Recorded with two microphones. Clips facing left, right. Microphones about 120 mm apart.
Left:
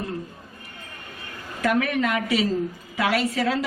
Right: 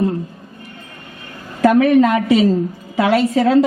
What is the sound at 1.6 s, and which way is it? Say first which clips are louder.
A woman's voice: right 11 dB; 30° right (ahead or behind).